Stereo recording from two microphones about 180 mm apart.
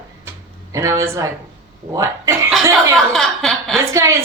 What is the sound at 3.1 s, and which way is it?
Speech, centre (ahead or behind).